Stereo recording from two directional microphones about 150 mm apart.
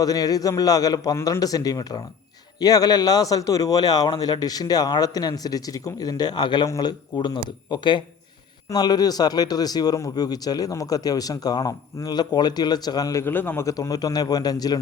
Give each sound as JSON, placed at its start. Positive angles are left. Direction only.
{"t": 0.0, "sound": "speech", "side_deg": 25}